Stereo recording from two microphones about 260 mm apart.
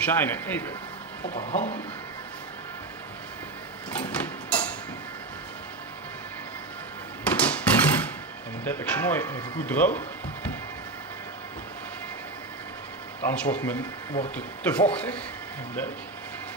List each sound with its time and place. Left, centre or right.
0.0 s speech: centre
1.2 s speech: left
4.0 s a sound: centre
7.2 s a sound: centre
8.6 s speech: centre
13.2 s speech: centre